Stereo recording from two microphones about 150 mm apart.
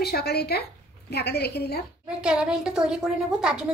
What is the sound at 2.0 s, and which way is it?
A woman's voice, 5° right (ahead or behind).